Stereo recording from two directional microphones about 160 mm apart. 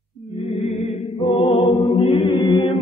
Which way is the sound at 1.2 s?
35° left (ahead or behind).